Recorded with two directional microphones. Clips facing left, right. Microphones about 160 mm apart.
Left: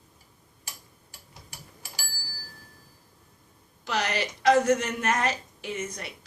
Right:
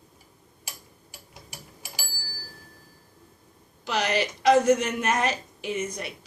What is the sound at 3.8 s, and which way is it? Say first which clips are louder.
A woman's voice: right 3 dB; 20° right (ahead or behind).